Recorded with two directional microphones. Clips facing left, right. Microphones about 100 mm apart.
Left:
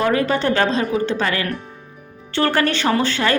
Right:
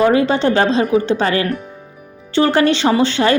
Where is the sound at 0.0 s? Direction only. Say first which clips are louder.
Right 5 dB; 20° right (ahead or behind).